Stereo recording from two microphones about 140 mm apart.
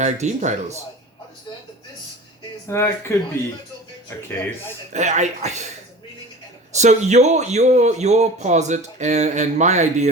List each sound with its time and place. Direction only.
0.0 s speech: 55° right (ahead or behind)
2.6 s speech: 15° left (ahead or behind)
4.9 s speech: 60° right (ahead or behind)
6.7 s speech: 55° right (ahead or behind)